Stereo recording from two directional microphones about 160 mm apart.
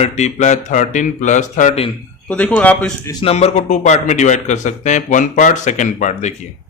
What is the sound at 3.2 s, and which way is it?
A man's voice, 40° left (ahead or behind).